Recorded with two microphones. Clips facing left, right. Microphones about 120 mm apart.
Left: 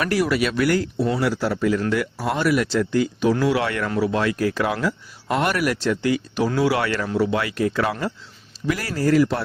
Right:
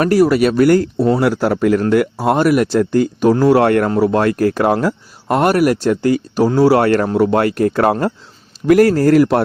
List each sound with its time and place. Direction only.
0.0 s speech: 40° right (ahead or behind); by 9.4 s 55° right (ahead or behind)